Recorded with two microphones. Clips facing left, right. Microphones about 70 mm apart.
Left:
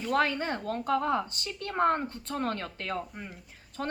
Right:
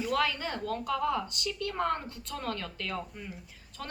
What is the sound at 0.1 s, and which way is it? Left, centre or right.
A woman's voice, left.